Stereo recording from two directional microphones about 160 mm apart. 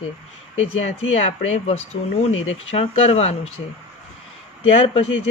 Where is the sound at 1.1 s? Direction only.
40° left (ahead or behind).